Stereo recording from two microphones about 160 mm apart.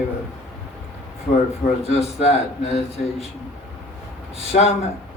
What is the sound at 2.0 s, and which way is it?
A man's voice, 40° left (ahead or behind).